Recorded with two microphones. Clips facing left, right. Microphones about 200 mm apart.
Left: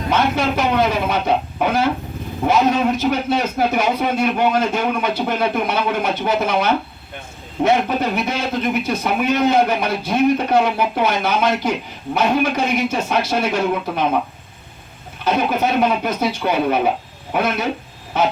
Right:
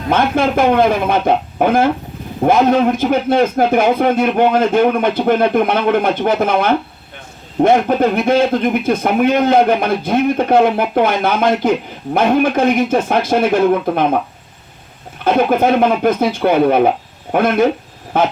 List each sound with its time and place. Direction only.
0.1 s a man's voice: 50° right (ahead or behind)
15.2 s a man's voice: 50° right (ahead or behind)